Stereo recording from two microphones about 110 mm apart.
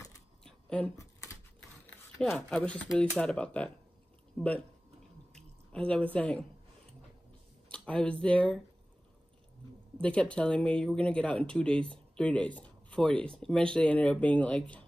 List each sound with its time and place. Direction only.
0.4 s a sound: 10° left (ahead or behind)
0.9 s a sound: 30° left (ahead or behind)
2.1 s speech: 5° left (ahead or behind)
5.3 s drip: 10° left (ahead or behind)
7.7 s speech: 10° left (ahead or behind)
9.9 s speech: 10° left (ahead or behind)